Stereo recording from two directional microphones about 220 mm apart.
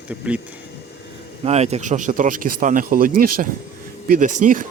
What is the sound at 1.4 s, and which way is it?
Speech, 30° right (ahead or behind).